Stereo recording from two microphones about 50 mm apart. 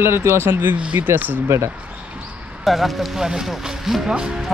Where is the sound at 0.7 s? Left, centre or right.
Right.